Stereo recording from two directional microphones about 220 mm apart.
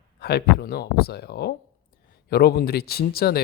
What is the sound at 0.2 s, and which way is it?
Speech, 45° left (ahead or behind).